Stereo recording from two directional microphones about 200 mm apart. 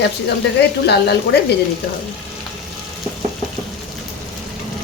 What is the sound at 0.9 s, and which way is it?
Speech, 55° left (ahead or behind).